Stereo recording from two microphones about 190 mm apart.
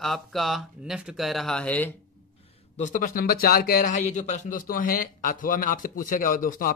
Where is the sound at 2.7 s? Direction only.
40° left (ahead or behind).